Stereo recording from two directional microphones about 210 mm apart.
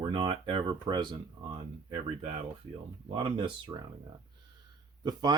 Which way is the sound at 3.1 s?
25° right (ahead or behind).